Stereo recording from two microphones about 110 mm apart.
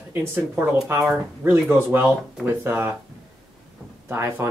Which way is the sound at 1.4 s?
20° right (ahead or behind).